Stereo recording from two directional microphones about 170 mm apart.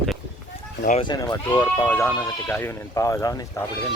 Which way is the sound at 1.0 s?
25° left (ahead or behind).